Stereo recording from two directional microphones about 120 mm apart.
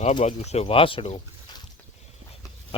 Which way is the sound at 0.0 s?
80° left.